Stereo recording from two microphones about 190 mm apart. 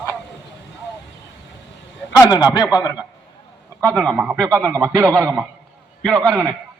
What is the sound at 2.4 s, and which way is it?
Speech, 20° left (ahead or behind).